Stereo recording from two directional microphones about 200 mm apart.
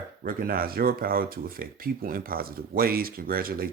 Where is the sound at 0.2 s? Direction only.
45° right (ahead or behind).